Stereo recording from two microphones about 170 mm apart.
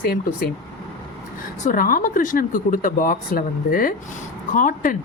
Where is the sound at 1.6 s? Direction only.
55° left (ahead or behind).